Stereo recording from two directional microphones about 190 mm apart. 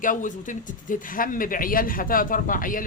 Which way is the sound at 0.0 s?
45° left (ahead or behind).